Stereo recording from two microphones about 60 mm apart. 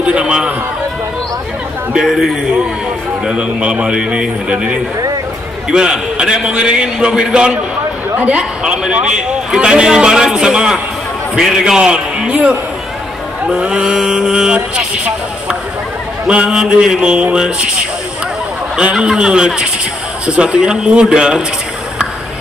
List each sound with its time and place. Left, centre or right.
0.0 s a man's voice: centre
2.0 s a man's voice: centre
3.3 s a man's voice: centre
18.8 s a man's voice: centre